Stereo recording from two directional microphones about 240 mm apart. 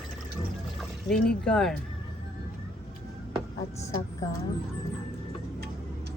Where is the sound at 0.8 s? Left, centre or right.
Centre.